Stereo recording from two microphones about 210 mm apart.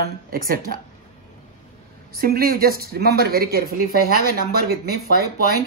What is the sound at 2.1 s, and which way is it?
Speech, 45° right (ahead or behind).